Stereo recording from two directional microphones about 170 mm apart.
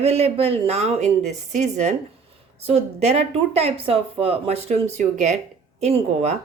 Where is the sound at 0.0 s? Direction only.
40° right (ahead or behind).